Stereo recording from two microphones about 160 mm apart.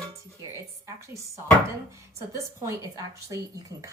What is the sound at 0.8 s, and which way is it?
Speech, 20° right (ahead or behind).